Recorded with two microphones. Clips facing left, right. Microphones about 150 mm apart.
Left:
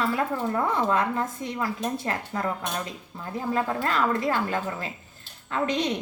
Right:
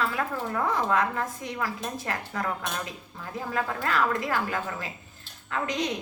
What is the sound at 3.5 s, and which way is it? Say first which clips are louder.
A woman's voice: left 3 dB; 25° left (ahead or behind).